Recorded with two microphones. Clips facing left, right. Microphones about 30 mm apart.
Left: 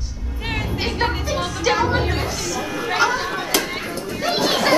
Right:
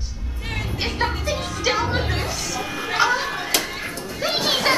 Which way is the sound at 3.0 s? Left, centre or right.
Centre.